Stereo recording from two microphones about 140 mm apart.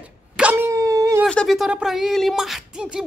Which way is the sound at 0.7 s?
25° right (ahead or behind).